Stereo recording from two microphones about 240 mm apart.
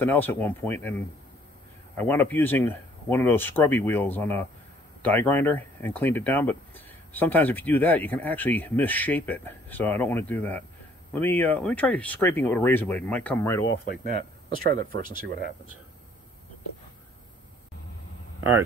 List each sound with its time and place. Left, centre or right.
0.0 s speech: centre
14.0 s speech: right